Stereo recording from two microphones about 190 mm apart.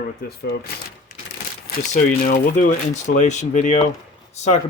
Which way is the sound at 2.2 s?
45° left (ahead or behind).